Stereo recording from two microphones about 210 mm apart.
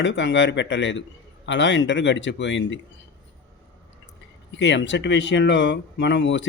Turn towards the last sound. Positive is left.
turn(degrees=60)  # may be behind; listen again after turning